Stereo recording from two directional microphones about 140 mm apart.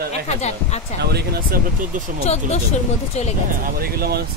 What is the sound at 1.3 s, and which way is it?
Speech, 90° right.